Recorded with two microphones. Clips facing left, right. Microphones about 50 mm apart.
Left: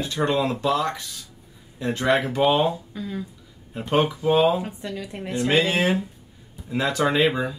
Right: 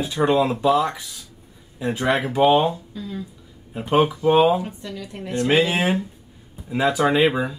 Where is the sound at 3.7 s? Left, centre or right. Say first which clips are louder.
Right 3 dB; centre.